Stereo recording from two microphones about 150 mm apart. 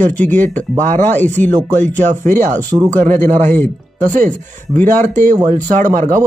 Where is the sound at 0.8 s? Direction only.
55° right (ahead or behind).